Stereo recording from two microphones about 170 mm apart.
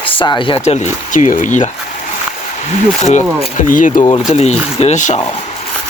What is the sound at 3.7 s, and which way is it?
Speech, 50° left (ahead or behind).